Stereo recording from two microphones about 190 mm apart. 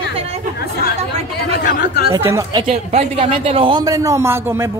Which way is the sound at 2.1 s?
15° right (ahead or behind).